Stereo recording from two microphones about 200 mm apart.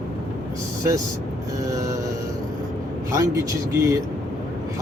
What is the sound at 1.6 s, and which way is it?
Music, 15° right (ahead or behind).